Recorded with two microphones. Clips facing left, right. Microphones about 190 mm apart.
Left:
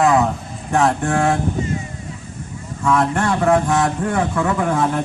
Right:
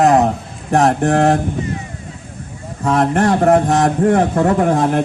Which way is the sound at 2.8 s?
35° right (ahead or behind).